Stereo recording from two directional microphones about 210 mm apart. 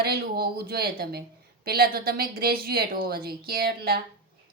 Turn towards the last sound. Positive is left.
turn(degrees=-45)  # may be behind; listen again after turning